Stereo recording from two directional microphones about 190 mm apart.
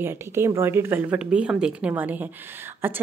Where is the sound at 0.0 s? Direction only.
10° right (ahead or behind).